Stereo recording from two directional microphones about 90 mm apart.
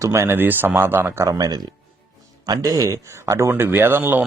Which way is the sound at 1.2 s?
40° right (ahead or behind).